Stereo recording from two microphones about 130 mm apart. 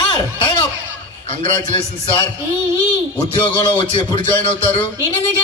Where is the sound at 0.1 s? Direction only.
35° left (ahead or behind).